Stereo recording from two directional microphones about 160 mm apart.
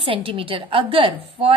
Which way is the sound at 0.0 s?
35° right (ahead or behind).